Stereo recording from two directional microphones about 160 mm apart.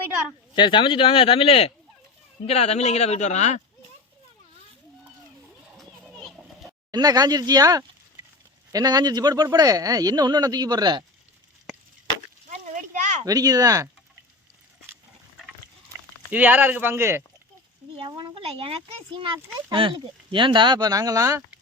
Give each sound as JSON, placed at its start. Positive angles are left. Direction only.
{"t": 0.3, "sound": "speech", "side_deg": 30}
{"t": 5.7, "sound": "children playing", "side_deg": 0}
{"t": 6.9, "sound": "speech", "side_deg": -25}
{"t": 12.5, "sound": "a sound", "side_deg": -50}
{"t": 13.2, "sound": "speech", "side_deg": -20}
{"t": 16.3, "sound": "speech", "side_deg": -10}
{"t": 17.9, "sound": "a child's voice", "side_deg": -30}